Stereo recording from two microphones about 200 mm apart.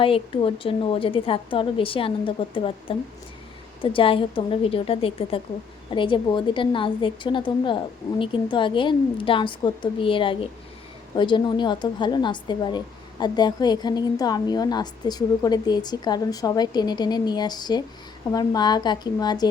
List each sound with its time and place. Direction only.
0.0 s a woman's voice: 25° left (ahead or behind)